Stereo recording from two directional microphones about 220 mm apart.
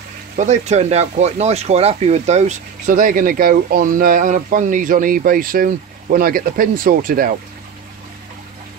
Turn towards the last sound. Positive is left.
turn(degrees=-40)  # may be behind; listen again after turning